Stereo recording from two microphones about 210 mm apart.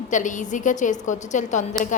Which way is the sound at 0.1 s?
35° left (ahead or behind).